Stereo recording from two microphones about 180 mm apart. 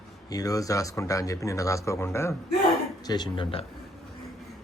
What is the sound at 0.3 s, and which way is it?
Speech, 20° left (ahead or behind).